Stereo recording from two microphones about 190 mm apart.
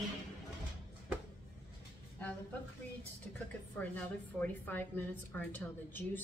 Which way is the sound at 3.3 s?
5° left (ahead or behind).